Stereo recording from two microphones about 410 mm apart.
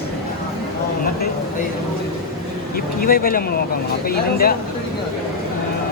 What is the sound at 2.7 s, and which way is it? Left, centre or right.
Speech, left.